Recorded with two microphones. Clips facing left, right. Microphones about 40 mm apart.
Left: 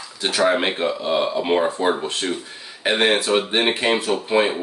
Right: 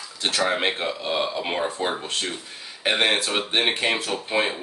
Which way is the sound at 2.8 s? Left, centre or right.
Centre.